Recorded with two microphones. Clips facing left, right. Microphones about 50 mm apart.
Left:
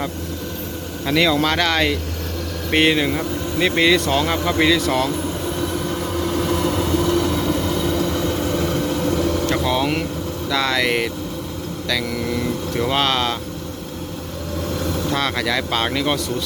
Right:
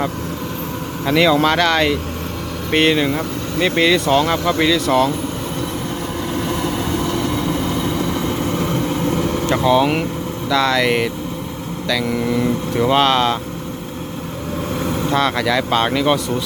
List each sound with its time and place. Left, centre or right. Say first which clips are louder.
1.0 s speech: right 3 dB; centre
1.5 s speech: right 3 dB; centre
4.4 s speech: right 1 dB; centre
6.2 s vehicle: left 1 dB; centre; by 9.5 s right
9.6 s speech: right 5 dB; centre
10.5 s speech: right 4 dB; centre
12.1 s speech: right 4 dB; centre
14.8 s vehicle: right 3 dB; right
15.1 s speech: right 5 dB; centre